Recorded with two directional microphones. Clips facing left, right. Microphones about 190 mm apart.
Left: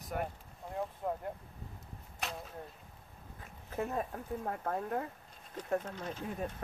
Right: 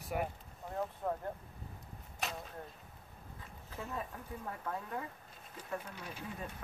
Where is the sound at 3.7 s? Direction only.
50° left (ahead or behind).